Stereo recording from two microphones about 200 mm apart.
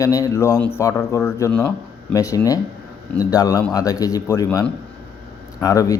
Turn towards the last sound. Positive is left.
turn(degrees=15)  # may be behind; listen again after turning